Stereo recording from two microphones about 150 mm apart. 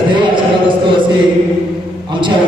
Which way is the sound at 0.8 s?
30° right (ahead or behind).